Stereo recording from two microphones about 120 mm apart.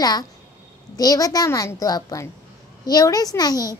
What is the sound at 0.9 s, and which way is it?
A woman's voice, 30° left (ahead or behind).